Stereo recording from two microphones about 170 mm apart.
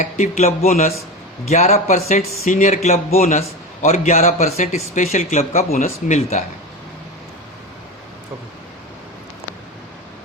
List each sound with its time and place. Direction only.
0.0 s speech: 45° left (ahead or behind)